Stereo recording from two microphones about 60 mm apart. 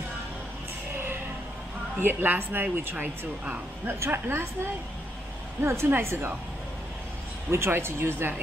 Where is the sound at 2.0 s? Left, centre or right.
Right.